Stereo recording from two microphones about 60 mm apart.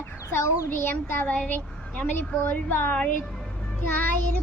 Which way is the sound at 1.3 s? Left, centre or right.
Left.